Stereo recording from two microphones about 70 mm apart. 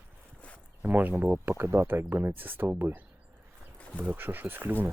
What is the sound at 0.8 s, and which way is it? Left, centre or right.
Speech, right.